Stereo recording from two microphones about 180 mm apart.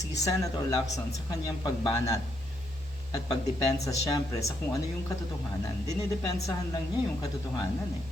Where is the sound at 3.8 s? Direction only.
20° left (ahead or behind).